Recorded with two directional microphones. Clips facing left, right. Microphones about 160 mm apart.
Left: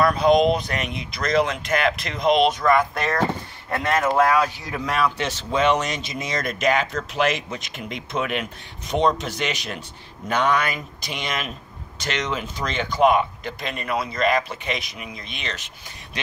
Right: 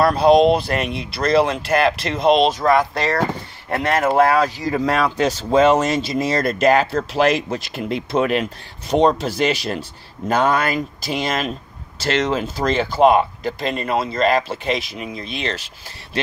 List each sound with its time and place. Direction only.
0.0 s speech: 35° right (ahead or behind)
2.9 s speech: 75° right (ahead or behind)
3.7 s speech: 35° right (ahead or behind)